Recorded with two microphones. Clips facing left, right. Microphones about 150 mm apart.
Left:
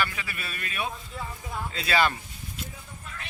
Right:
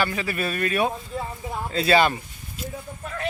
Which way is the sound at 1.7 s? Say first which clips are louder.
Right 13 dB; 35° right (ahead or behind).